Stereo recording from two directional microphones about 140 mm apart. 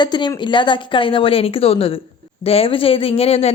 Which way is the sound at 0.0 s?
30° left (ahead or behind).